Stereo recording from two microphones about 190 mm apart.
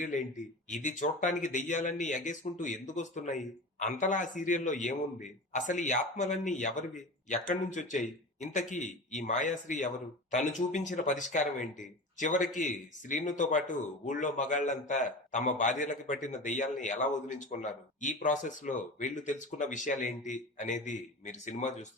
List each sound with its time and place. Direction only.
0.0 s speech: 40° left (ahead or behind)